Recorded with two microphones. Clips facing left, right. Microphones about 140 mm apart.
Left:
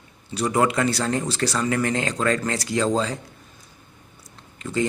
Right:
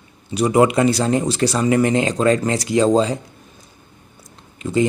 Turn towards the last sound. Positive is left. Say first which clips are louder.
# right 6 dB
turn(degrees=-15)  # may be behind; listen again after turning